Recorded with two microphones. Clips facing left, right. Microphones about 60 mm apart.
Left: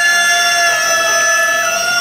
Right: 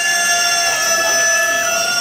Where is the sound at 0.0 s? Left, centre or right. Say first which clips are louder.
Left 5 dB; left.